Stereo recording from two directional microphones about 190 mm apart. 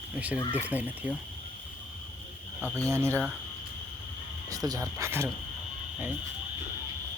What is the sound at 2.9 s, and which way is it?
Speech, 15° right (ahead or behind).